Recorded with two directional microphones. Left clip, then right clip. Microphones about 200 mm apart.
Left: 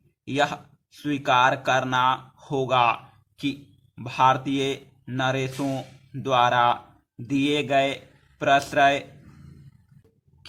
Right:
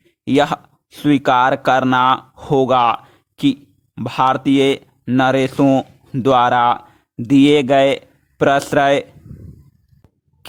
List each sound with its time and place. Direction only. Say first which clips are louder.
0.3 s speech: right 9 dB; 50° right (ahead or behind)